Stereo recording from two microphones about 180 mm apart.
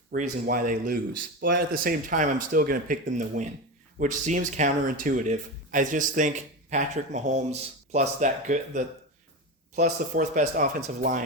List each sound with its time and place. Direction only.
0.1 s speech: 50° right (ahead or behind)
9.8 s speech: 45° right (ahead or behind)